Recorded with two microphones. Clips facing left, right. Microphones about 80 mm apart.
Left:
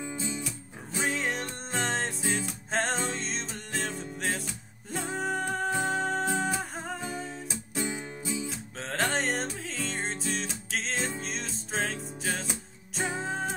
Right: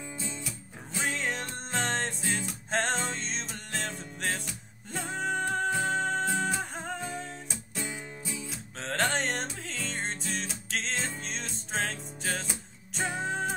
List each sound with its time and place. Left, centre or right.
0.0 s music: centre
0.4 s music: centre